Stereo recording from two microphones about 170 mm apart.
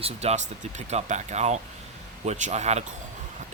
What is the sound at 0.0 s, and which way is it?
Speech, 40° right (ahead or behind).